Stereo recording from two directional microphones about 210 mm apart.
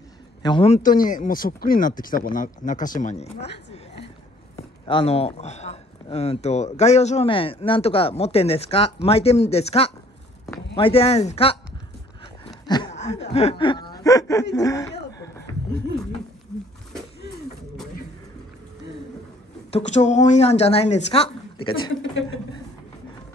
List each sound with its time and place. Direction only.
0.4 s speech: 25° left (ahead or behind)
12.6 s a sound: 20° left (ahead or behind)
13.3 s snicker: 30° left (ahead or behind)
14.5 s speech: 15° left (ahead or behind)
19.7 s speech: 35° left (ahead or behind)